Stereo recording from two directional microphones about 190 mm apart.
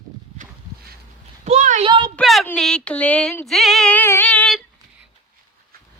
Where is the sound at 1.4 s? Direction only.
40° right (ahead or behind).